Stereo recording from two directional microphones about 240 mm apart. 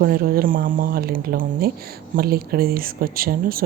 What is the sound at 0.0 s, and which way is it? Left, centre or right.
Speech, right.